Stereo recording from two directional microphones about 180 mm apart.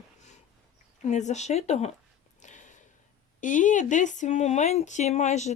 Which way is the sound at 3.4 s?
45° left (ahead or behind).